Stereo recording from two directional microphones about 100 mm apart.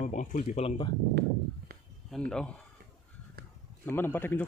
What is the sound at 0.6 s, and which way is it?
Speech, 75° left (ahead or behind).